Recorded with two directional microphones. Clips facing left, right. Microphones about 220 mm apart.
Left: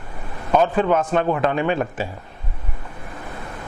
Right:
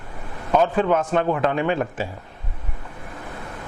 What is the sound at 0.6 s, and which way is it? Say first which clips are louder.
Speech: left 1 dB; 20° left (ahead or behind).